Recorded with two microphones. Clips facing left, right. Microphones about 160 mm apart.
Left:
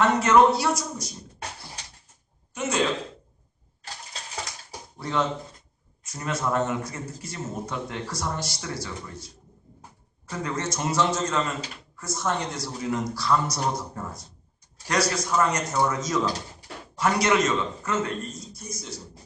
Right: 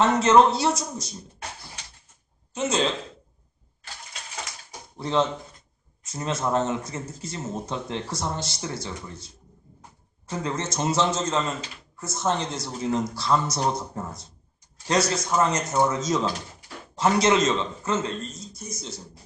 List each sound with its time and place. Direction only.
0.0 s speech: 25° right (ahead or behind)
2.5 s a man's voice: 25° right (ahead or behind)
3.8 s vehicle: 40° left (ahead or behind)
4.9 s speech: 25° right (ahead or behind)